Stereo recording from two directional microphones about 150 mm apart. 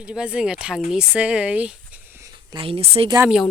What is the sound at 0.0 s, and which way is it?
Speech, 5° right (ahead or behind).